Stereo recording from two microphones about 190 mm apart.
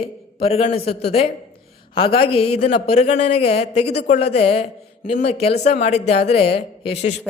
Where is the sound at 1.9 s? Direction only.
30° left (ahead or behind).